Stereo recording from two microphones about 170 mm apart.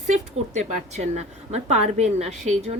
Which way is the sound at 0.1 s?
40° right (ahead or behind).